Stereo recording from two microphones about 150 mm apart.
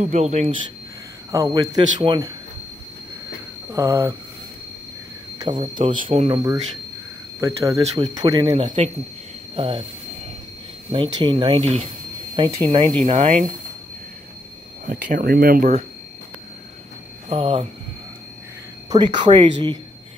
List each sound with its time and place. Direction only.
0.0 s speech: 50° right (ahead or behind)
1.3 s speech: 25° right (ahead or behind)
3.7 s speech: 20° right (ahead or behind)
5.6 s speech: 35° right (ahead or behind)
7.3 s speech: 20° right (ahead or behind); by 9.8 s 40° right (ahead or behind)
10.9 s speech: 30° right (ahead or behind)
13.0 s speech: 50° right (ahead or behind)
14.9 s speech: 65° right (ahead or behind)
17.3 s speech: 40° right (ahead or behind)
18.9 s speech: 30° right (ahead or behind)